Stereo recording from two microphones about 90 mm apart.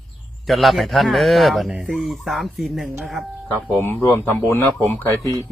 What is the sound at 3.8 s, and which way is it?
Speech, 25° left (ahead or behind).